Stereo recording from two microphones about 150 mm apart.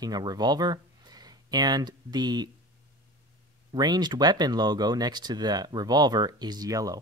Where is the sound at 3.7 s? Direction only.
30° right (ahead or behind).